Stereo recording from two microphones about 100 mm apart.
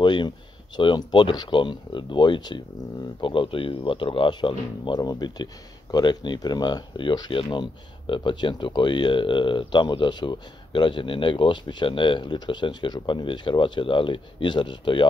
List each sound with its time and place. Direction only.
0.0 s speech: 50° left (ahead or behind)